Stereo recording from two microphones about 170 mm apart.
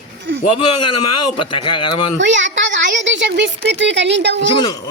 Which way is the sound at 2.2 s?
90° right.